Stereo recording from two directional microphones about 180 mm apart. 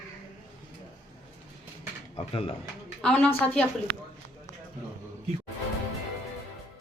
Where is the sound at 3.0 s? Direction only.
5° left (ahead or behind).